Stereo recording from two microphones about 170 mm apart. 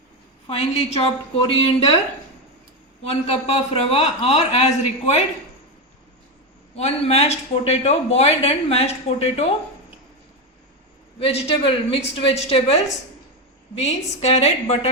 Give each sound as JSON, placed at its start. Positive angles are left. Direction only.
{"t": 0.4, "sound": "speech", "side_deg": 35}
{"t": 3.0, "sound": "speech", "side_deg": 35}
{"t": 6.7, "sound": "speech", "side_deg": 35}
{"t": 11.2, "sound": "speech", "side_deg": 35}